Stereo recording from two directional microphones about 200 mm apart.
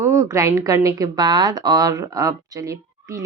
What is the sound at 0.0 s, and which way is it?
Speech, 15° right (ahead or behind).